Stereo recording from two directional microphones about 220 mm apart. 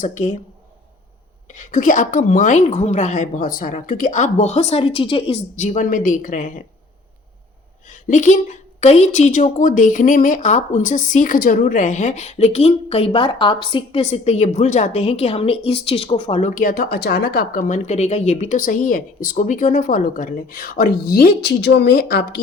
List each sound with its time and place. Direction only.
0.0 s a woman's voice: 35° left (ahead or behind)
1.5 s a woman's voice: 35° left (ahead or behind)
7.9 s a woman's voice: 35° left (ahead or behind)